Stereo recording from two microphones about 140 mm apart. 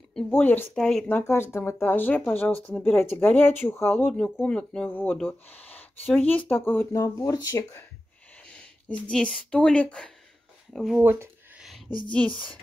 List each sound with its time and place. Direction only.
0.3 s speech: 15° left (ahead or behind)
1.0 s speech: 15° left (ahead or behind)
6.9 s speech: 25° left (ahead or behind)
8.5 s a sound: 10° left (ahead or behind)
9.1 s speech: 5° left (ahead or behind)
11.0 s speech: 10° right (ahead or behind)